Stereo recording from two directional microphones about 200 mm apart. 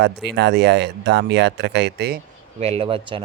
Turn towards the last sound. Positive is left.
turn(degrees=-25)  # may be behind; listen again after turning